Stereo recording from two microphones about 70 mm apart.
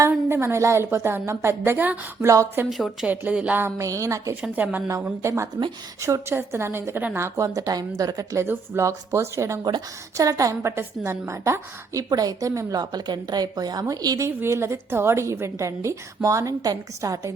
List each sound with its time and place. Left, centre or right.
0.3 s a woman's voice: right
2.2 s a woman's voice: right
2.6 s speech: centre
3.1 s speech: right
3.8 s a woman's voice: right
4.5 s speech: right
5.2 s a woman's voice: right
8.4 s a woman's voice: right
12.0 s speech: right
12.8 s a woman's voice: right
14.2 s a woman's voice: right